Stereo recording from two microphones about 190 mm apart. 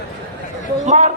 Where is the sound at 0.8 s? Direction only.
35° right (ahead or behind).